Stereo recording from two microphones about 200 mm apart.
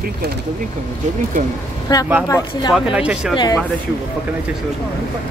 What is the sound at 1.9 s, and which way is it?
Speech, 20° left (ahead or behind).